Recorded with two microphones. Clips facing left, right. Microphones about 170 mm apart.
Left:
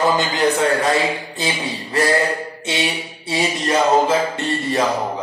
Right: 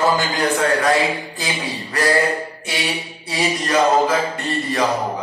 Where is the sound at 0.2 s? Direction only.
20° left (ahead or behind).